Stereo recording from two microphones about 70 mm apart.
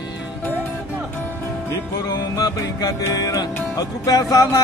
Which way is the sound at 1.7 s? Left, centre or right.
Left.